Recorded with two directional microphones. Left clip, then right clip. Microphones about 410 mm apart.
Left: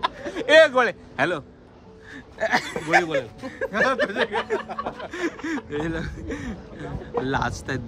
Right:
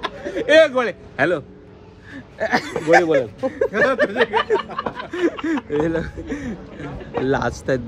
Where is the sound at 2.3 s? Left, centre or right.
Centre.